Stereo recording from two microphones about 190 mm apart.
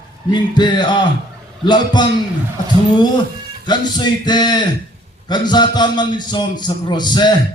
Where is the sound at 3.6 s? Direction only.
20° left (ahead or behind).